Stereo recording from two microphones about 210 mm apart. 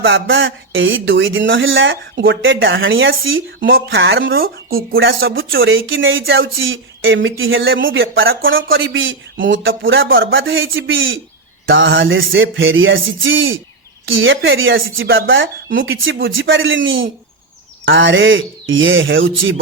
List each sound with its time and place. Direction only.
0.0 s speech: 65° right (ahead or behind)
3.7 s speech: 50° right (ahead or behind)
4.4 s speech: 45° right (ahead or behind)
5.5 s speech: 70° right (ahead or behind)
15.0 s speech: 55° right (ahead or behind)